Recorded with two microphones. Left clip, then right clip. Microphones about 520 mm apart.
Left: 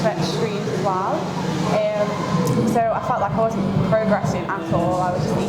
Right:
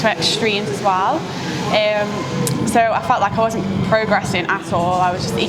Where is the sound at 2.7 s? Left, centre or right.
Right.